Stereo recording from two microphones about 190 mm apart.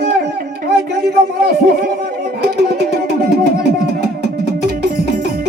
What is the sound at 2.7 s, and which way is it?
Music, 60° right (ahead or behind).